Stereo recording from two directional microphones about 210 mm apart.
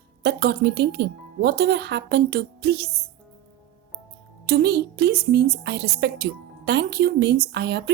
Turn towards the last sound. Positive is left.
turn(degrees=-55)  # may be behind; listen again after turning